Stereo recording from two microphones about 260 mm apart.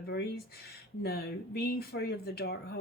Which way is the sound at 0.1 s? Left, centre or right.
Left.